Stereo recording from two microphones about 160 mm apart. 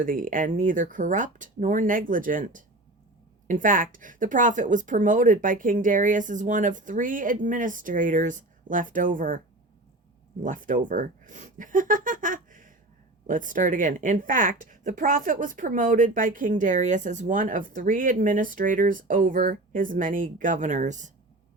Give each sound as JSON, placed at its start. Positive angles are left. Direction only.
{"t": 0.0, "sound": "speech", "side_deg": -60}
{"t": 10.4, "sound": "speech", "side_deg": -55}